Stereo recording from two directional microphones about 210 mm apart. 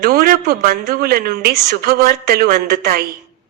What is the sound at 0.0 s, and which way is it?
A woman's voice, 45° right (ahead or behind).